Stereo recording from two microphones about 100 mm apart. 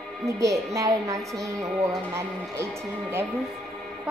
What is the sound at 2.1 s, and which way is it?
Speech, 25° right (ahead or behind).